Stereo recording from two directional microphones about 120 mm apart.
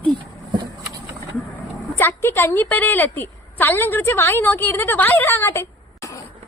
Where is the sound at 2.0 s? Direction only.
15° left (ahead or behind).